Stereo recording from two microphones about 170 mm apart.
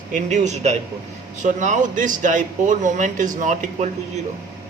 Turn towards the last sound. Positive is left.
turn(degrees=-45)  # may be behind; listen again after turning